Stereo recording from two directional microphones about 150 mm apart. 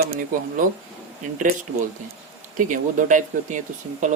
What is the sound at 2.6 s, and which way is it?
Speech, 60° right (ahead or behind).